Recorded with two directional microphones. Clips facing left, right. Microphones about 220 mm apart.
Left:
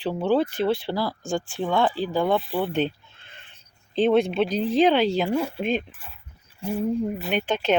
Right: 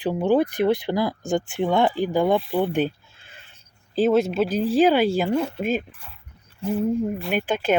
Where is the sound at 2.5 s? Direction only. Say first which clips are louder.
Right 2 dB; 10° right (ahead or behind).